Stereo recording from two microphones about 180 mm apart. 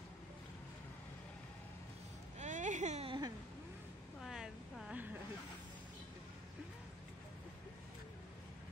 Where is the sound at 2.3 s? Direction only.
40° right (ahead or behind).